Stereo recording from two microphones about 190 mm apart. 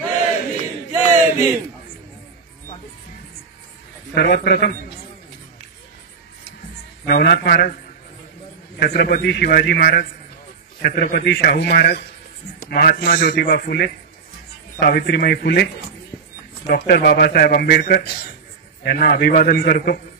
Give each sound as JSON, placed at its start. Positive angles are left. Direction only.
{"t": 1.0, "sound": "a sound", "side_deg": 40}
{"t": 4.1, "sound": "a man's voice", "side_deg": 55}
{"t": 7.1, "sound": "a man's voice", "side_deg": 55}
{"t": 8.7, "sound": "a man's voice", "side_deg": 55}